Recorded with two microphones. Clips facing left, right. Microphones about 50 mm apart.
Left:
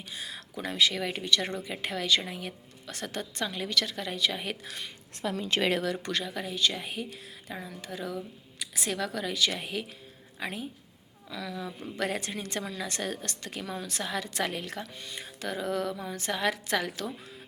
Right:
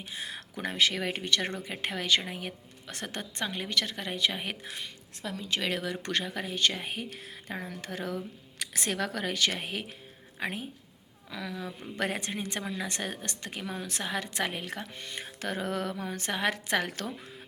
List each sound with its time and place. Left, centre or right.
0.1 s a woman's voice: right
5.2 s a woman's voice: left
6.1 s a woman's voice: right
7.7 s speech: right
8.8 s a woman's voice: right; by 14.8 s centre
15.0 s speech: right